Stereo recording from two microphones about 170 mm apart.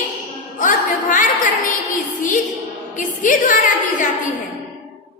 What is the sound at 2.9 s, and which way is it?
Speech, 50° left (ahead or behind).